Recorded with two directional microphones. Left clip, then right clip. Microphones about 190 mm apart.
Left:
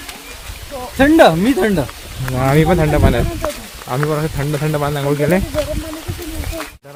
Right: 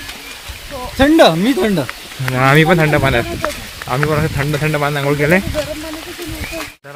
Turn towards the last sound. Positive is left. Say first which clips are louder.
# right 2 dB
turn(degrees=5)  # may be behind; listen again after turning